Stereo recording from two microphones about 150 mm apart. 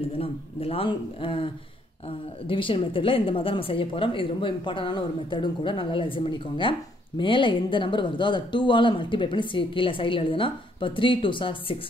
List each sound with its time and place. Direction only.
0.2 s a woman's voice: 40° left (ahead or behind)